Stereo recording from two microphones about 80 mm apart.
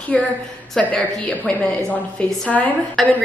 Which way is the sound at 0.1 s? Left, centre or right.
Centre.